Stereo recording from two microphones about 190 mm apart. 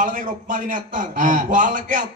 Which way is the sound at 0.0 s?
40° right (ahead or behind).